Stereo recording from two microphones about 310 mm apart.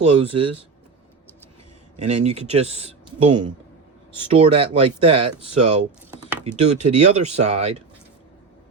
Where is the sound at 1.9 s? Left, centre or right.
Right.